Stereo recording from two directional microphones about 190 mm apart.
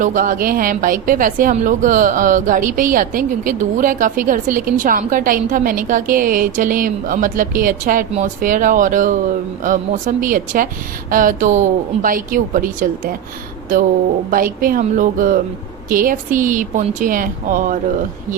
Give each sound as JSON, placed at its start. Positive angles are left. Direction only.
{"t": 0.0, "sound": "a woman's voice", "side_deg": -45}
{"t": 14.3, "sound": "a woman's voice", "side_deg": -45}